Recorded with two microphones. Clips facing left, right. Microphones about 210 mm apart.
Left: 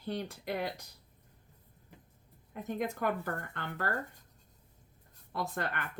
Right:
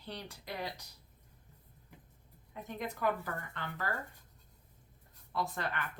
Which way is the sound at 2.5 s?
50° left (ahead or behind).